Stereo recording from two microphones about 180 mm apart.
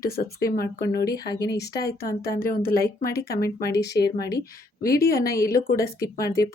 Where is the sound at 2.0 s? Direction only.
55° left (ahead or behind).